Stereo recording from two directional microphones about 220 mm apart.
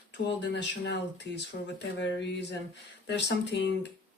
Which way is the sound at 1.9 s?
50° left (ahead or behind).